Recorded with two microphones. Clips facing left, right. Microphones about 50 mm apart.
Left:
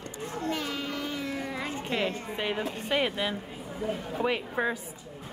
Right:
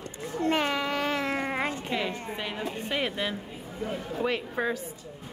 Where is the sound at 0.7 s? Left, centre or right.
Right.